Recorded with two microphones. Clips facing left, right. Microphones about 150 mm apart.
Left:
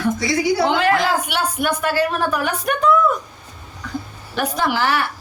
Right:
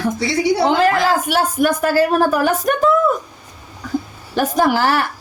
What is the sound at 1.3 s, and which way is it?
A woman's voice, 40° right (ahead or behind).